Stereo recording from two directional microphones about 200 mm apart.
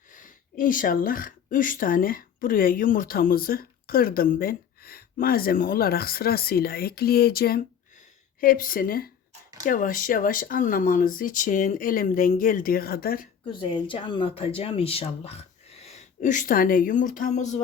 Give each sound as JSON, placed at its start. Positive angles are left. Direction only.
{"t": 0.1, "sound": "speech", "side_deg": 40}
{"t": 13.5, "sound": "speech", "side_deg": 25}